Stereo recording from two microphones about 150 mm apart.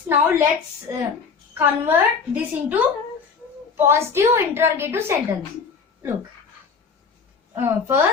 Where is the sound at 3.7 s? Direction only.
15° right (ahead or behind).